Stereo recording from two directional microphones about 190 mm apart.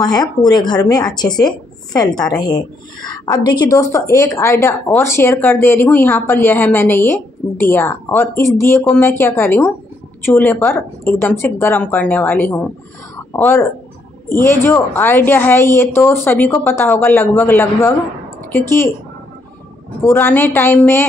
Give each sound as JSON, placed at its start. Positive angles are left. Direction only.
{"t": 0.0, "sound": "speech", "side_deg": 20}
{"t": 13.1, "sound": "a sound", "side_deg": 10}
{"t": 14.4, "sound": "speech", "side_deg": 10}
{"t": 20.0, "sound": "speech", "side_deg": 10}